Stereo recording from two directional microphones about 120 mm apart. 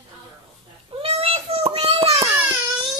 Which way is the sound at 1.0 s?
55° right (ahead or behind).